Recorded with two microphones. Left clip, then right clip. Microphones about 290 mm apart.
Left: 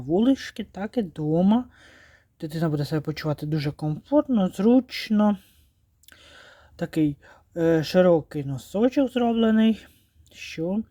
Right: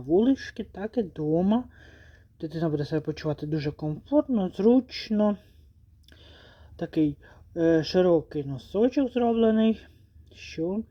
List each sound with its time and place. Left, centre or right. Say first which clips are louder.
0.1 s speech: left 1 dB; left